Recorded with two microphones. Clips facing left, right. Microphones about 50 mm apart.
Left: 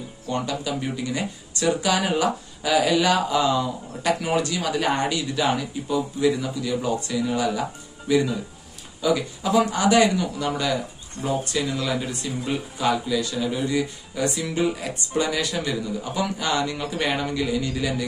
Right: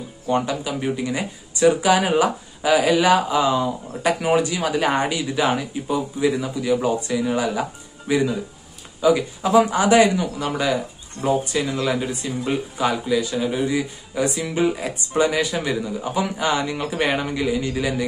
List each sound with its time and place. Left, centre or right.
0.3 s speech: right